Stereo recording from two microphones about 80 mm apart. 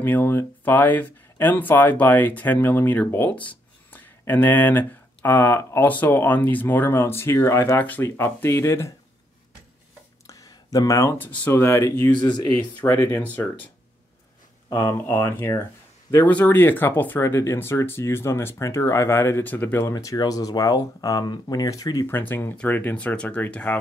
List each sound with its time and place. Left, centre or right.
0.0 s speech: left
3.3 s a sound: left
4.3 s speech: left
10.2 s a sound: left
11.1 s speech: left
14.7 s speech: left
15.0 s speech: left
16.3 s speech: left
17.2 s speech: left
19.4 s speech: left
19.9 s speech: left
22.3 s speech: left